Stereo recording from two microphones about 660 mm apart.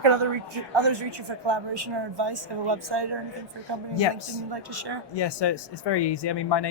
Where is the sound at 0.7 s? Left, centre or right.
Right.